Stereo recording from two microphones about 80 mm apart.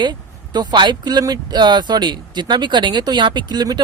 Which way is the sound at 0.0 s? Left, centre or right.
Right.